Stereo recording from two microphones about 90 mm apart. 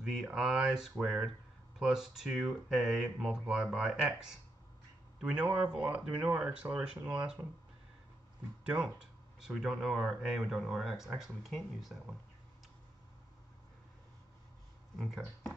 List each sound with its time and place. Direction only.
0.0 s speech: 10° right (ahead or behind)
8.6 s speech: 10° right (ahead or behind)
15.0 s speech: centre (ahead or behind)